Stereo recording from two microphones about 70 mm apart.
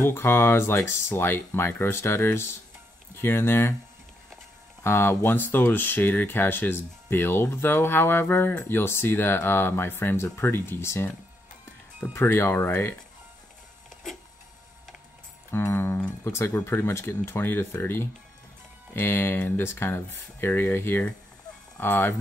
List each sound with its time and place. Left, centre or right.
0.0 s speech: left
4.8 s speech: left
12.3 s speech: left
15.5 s speech: left